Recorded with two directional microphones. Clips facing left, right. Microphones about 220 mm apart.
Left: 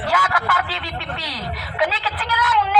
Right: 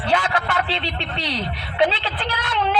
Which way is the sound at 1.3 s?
25° right (ahead or behind).